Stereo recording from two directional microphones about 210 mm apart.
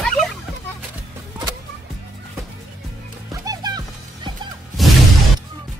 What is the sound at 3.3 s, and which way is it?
Music, 20° right (ahead or behind).